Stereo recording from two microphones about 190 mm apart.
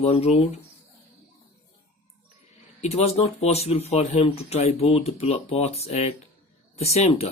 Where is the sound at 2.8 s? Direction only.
35° left (ahead or behind).